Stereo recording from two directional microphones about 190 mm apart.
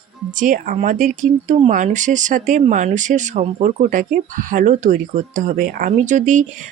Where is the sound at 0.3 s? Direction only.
45° right (ahead or behind).